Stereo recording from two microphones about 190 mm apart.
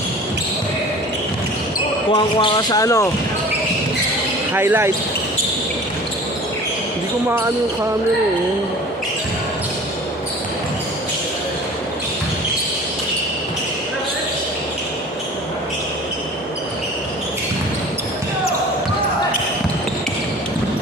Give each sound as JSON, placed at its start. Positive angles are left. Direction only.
{"t": 2.1, "sound": "speech", "side_deg": 25}
{"t": 4.5, "sound": "speech", "side_deg": -10}